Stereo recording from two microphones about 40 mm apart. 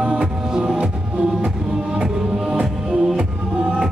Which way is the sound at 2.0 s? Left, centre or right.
Centre.